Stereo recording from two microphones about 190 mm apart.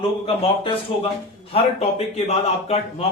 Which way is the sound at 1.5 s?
30° left (ahead or behind).